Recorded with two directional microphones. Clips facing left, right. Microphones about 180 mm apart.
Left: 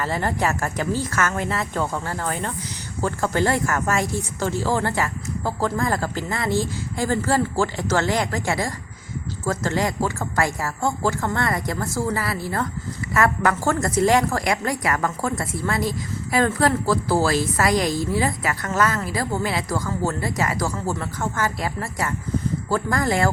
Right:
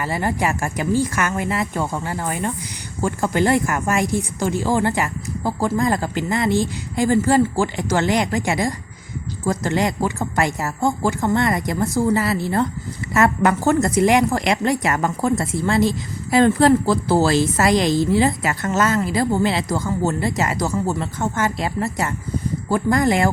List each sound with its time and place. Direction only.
0.0 s a woman's voice: 10° right (ahead or behind)